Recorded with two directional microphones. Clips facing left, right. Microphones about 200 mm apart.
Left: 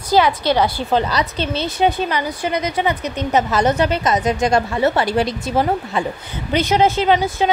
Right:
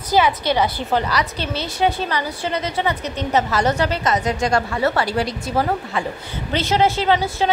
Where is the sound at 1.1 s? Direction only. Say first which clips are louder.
Left 2 dB; 20° left (ahead or behind).